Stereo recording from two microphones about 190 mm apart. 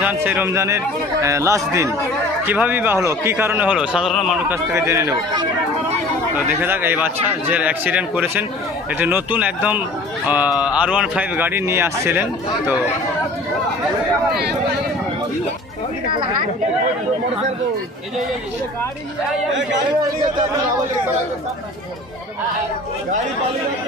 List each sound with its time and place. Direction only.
0.0 s speech: 10° right (ahead or behind)
4.4 s speech: 10° right (ahead or behind)
6.6 s speech: 10° right (ahead or behind)